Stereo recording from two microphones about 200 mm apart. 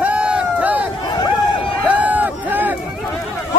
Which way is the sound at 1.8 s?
5° right (ahead or behind).